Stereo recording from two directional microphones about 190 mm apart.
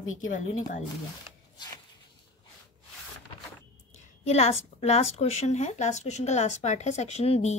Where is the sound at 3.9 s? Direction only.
35° left (ahead or behind).